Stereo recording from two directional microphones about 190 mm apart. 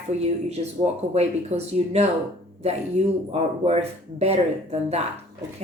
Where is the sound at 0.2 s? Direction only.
35° right (ahead or behind).